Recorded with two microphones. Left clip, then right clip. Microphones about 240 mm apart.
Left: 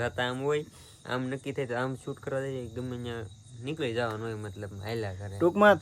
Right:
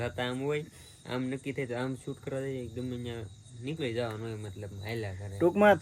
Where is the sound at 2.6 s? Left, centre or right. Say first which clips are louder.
Left 1 dB; centre.